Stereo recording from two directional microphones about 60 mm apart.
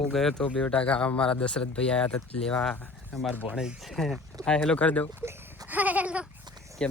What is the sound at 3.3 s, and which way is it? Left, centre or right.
Speech, right.